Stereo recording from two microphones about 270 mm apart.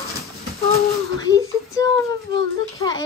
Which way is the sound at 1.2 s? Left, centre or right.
Centre.